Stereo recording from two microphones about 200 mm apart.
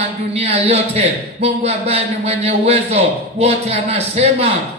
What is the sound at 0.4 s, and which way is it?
A man's voice, 30° right (ahead or behind).